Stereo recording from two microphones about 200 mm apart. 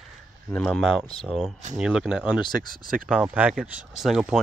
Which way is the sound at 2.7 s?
45° right (ahead or behind).